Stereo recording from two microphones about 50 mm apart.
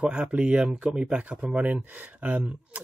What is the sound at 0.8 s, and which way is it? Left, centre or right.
Speech, centre.